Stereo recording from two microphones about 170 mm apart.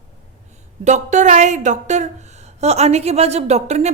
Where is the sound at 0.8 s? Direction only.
45° right (ahead or behind).